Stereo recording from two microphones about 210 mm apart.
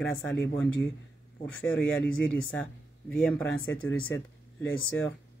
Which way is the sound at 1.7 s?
5° left (ahead or behind).